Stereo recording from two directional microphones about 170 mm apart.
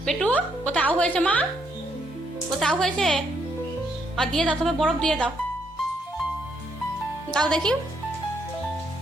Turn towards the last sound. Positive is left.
turn(degrees=5)  # may be behind; listen again after turning